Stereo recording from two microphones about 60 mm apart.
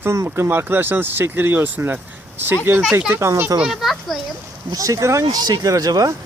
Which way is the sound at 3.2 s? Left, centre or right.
Right.